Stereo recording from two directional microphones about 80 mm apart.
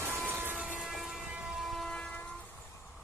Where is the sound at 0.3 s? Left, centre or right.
Right.